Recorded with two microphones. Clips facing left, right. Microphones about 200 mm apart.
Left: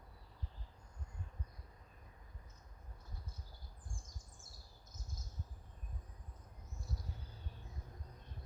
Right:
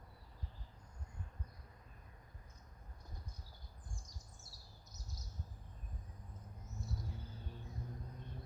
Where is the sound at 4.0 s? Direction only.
50° left (ahead or behind).